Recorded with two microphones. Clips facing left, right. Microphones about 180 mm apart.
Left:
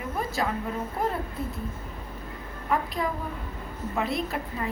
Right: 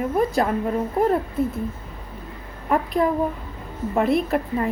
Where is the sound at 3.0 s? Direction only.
50° right (ahead or behind).